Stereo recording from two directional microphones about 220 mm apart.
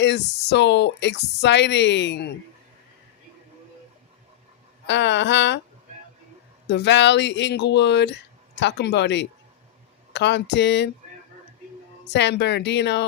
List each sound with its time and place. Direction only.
0.0 s speech: 50° left (ahead or behind)
4.9 s speech: 55° left (ahead or behind)
6.7 s speech: 50° left (ahead or behind)
12.1 s speech: 50° left (ahead or behind)